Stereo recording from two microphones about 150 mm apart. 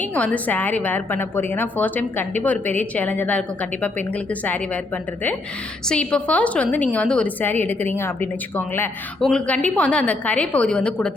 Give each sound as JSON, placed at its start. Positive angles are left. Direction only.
{"t": 0.0, "sound": "a woman's voice", "side_deg": 10}
{"t": 5.9, "sound": "a woman's voice", "side_deg": 5}